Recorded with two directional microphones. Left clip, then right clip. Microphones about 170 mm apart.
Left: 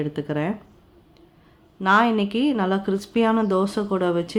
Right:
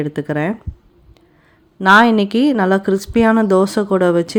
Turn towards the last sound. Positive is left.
turn(degrees=-40)  # may be behind; listen again after turning